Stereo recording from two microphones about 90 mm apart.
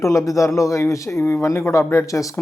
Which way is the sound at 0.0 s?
40° left (ahead or behind).